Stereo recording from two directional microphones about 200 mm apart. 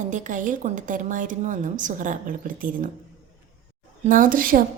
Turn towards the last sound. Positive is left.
turn(degrees=-45)  # may be behind; listen again after turning